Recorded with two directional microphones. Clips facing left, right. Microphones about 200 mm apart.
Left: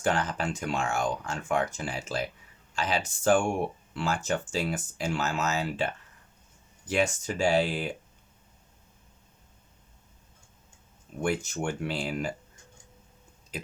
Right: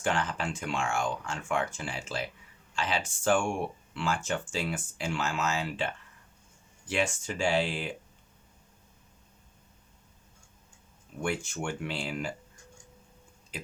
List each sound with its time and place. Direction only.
0.0 s speech: 40° left (ahead or behind)
11.2 s speech: 40° left (ahead or behind)